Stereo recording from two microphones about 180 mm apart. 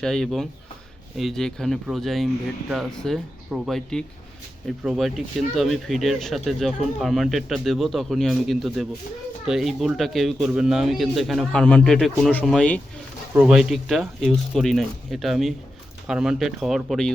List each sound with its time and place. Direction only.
0.0 s speech: 5° left (ahead or behind)